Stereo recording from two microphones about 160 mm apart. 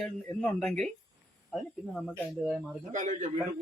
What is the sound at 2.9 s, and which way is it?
Speech, 50° right (ahead or behind).